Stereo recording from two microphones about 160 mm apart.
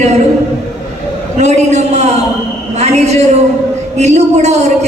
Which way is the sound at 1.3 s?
45° right (ahead or behind).